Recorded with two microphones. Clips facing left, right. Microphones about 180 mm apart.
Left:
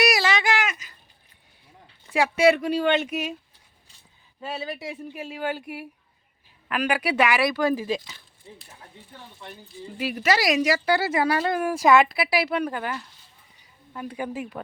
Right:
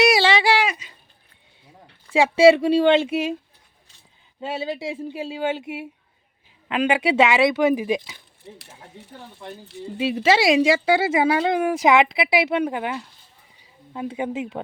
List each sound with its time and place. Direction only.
0.0 s a sound: 30° right (ahead or behind)
2.1 s speech: 25° right (ahead or behind)
4.4 s speech: 25° right (ahead or behind)
8.4 s speech: 75° right (ahead or behind)
10.0 s speech: 25° right (ahead or behind)